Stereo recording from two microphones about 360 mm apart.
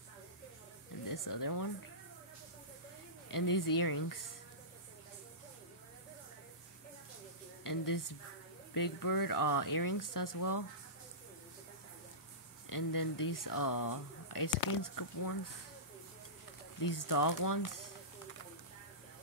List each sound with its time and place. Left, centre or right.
1.0 s speech: left
3.3 s speech: left
7.6 s speech: left
12.6 s speech: left
16.8 s speech: left